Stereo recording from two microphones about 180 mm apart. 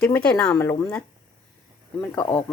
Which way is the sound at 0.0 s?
10° left (ahead or behind).